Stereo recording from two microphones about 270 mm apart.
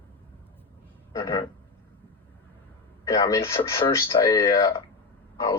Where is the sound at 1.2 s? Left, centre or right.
Centre.